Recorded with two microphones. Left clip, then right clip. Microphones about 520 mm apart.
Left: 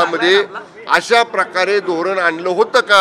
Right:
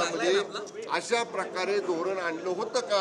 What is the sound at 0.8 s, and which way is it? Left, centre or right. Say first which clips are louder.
A man's voice: left 16 dB; left.